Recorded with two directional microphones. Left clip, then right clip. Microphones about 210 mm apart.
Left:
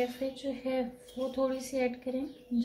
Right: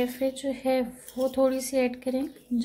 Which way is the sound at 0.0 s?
35° right (ahead or behind).